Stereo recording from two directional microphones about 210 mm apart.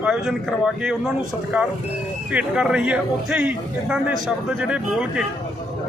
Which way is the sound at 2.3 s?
5° right (ahead or behind).